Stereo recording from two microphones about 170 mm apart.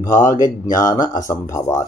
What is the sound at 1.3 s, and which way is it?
Speech, 20° left (ahead or behind).